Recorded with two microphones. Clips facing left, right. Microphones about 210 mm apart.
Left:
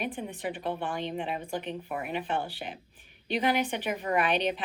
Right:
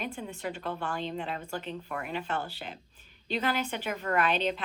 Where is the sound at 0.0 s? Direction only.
20° left (ahead or behind).